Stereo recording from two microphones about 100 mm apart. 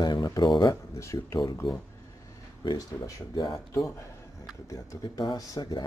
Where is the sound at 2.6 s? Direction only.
40° left (ahead or behind).